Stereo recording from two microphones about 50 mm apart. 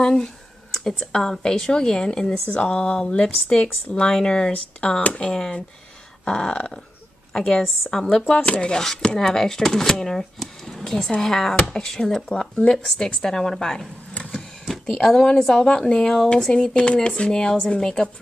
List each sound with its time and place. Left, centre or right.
0.0 s speech: centre
4.5 s speech: left
5.3 s speech: centre
7.9 s speech: centre